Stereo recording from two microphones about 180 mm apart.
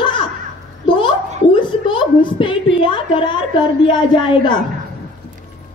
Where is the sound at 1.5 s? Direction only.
25° left (ahead or behind).